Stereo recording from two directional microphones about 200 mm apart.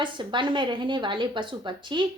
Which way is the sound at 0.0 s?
25° right (ahead or behind).